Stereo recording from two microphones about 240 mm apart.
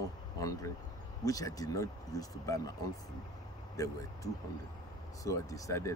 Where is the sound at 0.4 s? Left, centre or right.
Centre.